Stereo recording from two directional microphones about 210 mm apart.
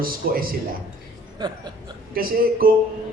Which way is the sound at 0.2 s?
45° right (ahead or behind).